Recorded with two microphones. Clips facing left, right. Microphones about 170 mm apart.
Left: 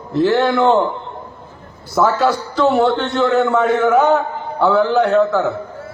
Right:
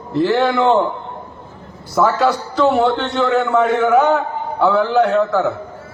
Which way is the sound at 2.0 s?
Centre (ahead or behind).